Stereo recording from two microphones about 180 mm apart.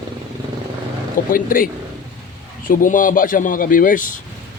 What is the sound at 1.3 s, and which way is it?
Speech, 50° left (ahead or behind).